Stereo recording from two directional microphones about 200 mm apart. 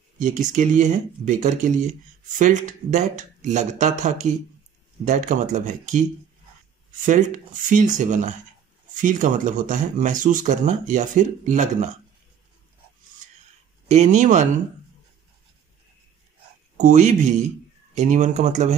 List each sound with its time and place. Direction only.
0.2 s speech: 40° right (ahead or behind)
7.1 s speech: 40° right (ahead or behind)
13.8 s speech: 35° right (ahead or behind)
16.7 s speech: 40° right (ahead or behind)